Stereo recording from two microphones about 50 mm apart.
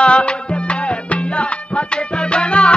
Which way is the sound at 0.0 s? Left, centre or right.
Left.